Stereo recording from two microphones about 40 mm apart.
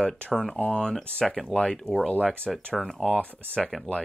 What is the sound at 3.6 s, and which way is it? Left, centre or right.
Speech, centre.